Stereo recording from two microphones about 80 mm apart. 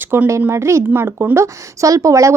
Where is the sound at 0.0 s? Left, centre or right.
Right.